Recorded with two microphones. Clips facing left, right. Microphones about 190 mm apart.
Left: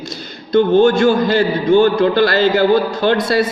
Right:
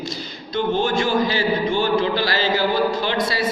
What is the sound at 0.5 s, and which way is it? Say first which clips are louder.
A man's voice: left 10 dB; 50° left (ahead or behind).